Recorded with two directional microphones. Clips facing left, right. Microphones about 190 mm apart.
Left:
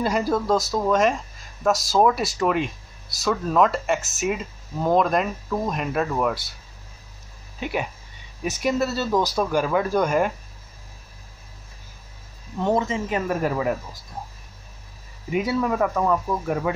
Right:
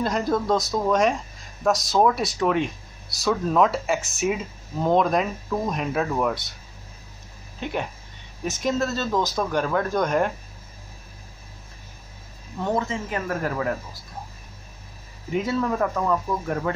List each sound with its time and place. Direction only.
0.0 s speech: 5° left (ahead or behind)
7.6 s speech: 10° left (ahead or behind)
12.6 s speech: 20° left (ahead or behind)
15.3 s speech: 10° left (ahead or behind)